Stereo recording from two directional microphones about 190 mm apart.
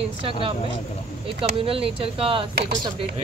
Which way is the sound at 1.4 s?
30° right (ahead or behind).